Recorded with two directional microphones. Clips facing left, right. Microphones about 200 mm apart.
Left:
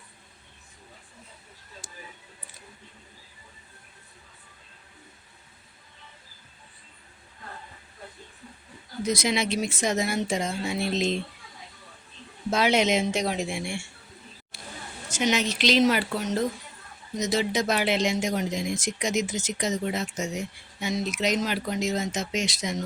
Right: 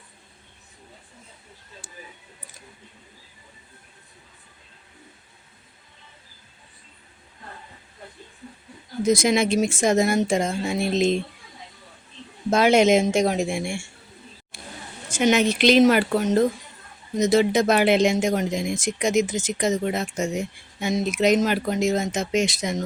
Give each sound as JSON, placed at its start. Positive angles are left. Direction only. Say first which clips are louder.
{"t": 9.0, "sound": "speech", "louder": "right 7 dB", "side_deg": -50}
{"t": 12.5, "sound": "speech", "louder": "right 6 dB", "side_deg": -50}
{"t": 14.5, "sound": "a sound", "louder": "right 2 dB", "side_deg": -50}
{"t": 15.1, "sound": "speech", "louder": "right 6 dB", "side_deg": -55}